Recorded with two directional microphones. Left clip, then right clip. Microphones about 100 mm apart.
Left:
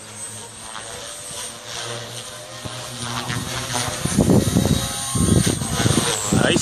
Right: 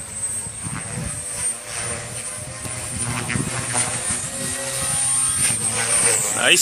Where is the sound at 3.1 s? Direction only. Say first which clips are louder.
Right 1 dB; 10° left (ahead or behind).